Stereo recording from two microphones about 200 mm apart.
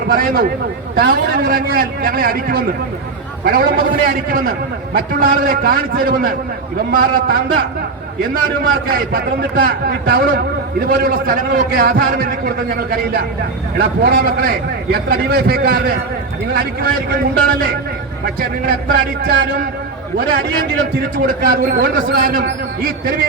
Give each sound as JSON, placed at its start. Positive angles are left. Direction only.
{"t": 0.1, "sound": "a man's voice", "side_deg": -45}
{"t": 21.4, "sound": "a man's voice", "side_deg": -50}